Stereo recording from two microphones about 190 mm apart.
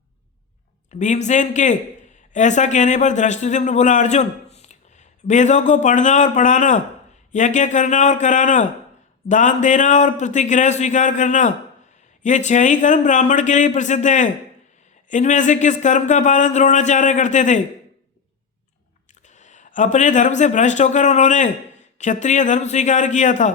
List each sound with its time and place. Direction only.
0.9 s speech: 40° left (ahead or behind)
19.4 s speech: 40° left (ahead or behind)